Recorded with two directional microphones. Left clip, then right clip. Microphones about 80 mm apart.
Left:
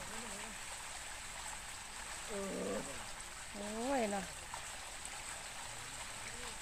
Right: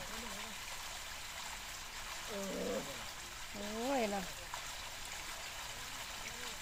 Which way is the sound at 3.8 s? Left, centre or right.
Right.